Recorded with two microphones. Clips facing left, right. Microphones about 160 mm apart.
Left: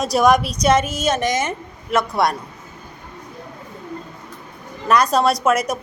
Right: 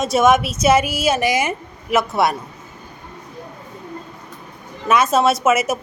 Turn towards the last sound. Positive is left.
turn(degrees=-5)  # may be behind; listen again after turning